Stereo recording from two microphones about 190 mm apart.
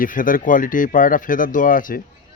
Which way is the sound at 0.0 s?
45° left (ahead or behind).